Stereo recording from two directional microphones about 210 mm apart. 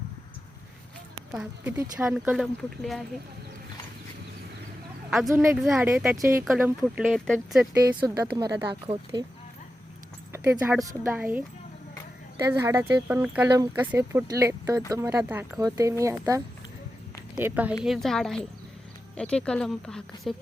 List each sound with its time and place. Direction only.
1.3 s speech: 5° right (ahead or behind)
5.3 s speech: 15° right (ahead or behind)
5.6 s speech: centre (ahead or behind)
6.4 s speech: centre (ahead or behind)
8.0 s speech: 20° right (ahead or behind)
10.3 s speech: 10° right (ahead or behind)
13.5 s speech: 20° right (ahead or behind); by 20.3 s 5° left (ahead or behind)